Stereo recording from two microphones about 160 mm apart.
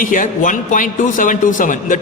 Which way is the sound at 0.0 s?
55° left (ahead or behind).